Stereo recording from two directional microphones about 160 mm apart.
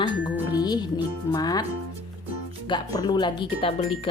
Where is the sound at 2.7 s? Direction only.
25° left (ahead or behind).